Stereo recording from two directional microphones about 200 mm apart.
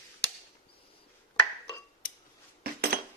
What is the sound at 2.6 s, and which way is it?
Cutlery, 50° right (ahead or behind).